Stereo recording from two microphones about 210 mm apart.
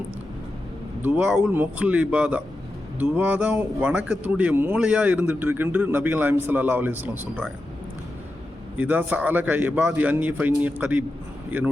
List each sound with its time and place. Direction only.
1.0 s speech: 5° right (ahead or behind)
8.8 s speech: 5° right (ahead or behind)